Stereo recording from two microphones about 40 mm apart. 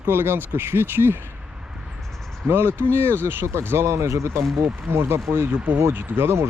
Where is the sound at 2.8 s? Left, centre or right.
Right.